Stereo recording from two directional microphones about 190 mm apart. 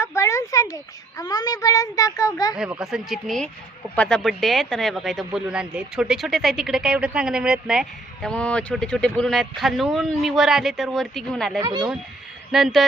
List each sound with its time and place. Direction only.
0.0 s a child's voice: 15° left (ahead or behind)
2.7 s speech: centre (ahead or behind)
11.6 s speech: 20° right (ahead or behind)
12.5 s speech: centre (ahead or behind)